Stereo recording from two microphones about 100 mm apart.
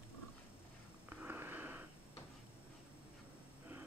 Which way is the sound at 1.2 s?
20° right (ahead or behind).